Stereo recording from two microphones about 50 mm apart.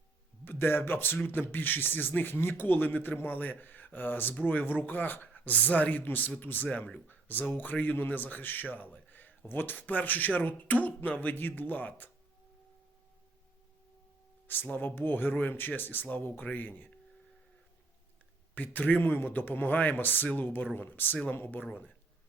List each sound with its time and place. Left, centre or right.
0.4 s speech: left
8.7 s a sound: left
9.5 s speech: left
14.4 s speech: left
18.5 s speech: left
21.7 s speech: left